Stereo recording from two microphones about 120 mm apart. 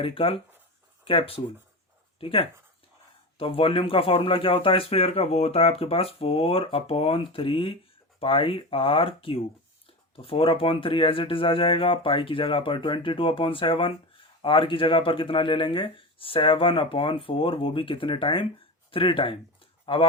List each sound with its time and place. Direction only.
0.0 s speech: 50° left (ahead or behind)